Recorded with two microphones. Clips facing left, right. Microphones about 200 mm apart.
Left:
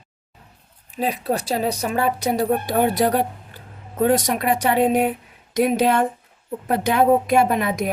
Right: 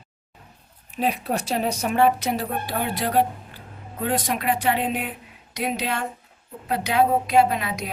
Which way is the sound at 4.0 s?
45° left (ahead or behind).